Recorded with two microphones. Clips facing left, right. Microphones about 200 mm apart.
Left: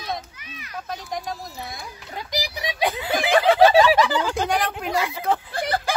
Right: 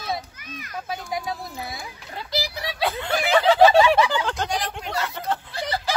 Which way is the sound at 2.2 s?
15° left (ahead or behind).